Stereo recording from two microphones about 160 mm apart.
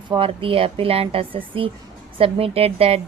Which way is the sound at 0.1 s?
35° right (ahead or behind).